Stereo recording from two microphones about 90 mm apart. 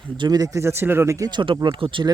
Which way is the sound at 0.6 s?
25° right (ahead or behind).